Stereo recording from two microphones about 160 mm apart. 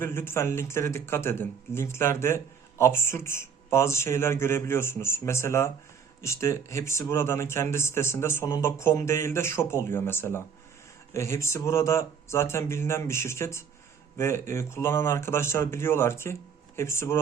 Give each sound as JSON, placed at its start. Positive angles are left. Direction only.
{"t": 0.0, "sound": "speech", "side_deg": 15}